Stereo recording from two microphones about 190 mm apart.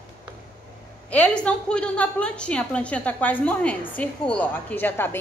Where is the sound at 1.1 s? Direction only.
5° left (ahead or behind).